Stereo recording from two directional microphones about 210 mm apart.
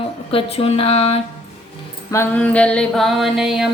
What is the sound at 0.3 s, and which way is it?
Speech, 25° left (ahead or behind).